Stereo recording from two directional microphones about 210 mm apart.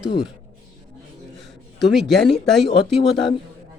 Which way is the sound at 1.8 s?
Centre (ahead or behind).